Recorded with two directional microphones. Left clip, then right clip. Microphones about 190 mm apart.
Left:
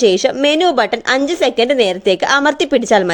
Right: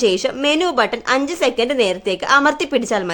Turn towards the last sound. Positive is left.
turn(degrees=25)  # may be behind; listen again after turning